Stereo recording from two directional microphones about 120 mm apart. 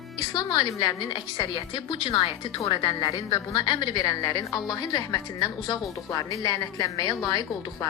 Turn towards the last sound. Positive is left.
turn(degrees=35)  # may be behind; listen again after turning